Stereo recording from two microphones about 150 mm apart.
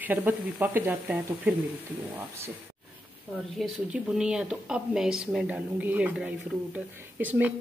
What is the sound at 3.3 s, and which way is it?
Speech, 5° right (ahead or behind).